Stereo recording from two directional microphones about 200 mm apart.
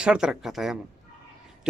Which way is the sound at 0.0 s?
5° right (ahead or behind).